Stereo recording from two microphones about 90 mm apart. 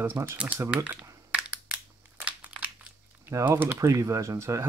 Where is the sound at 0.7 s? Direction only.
15° right (ahead or behind).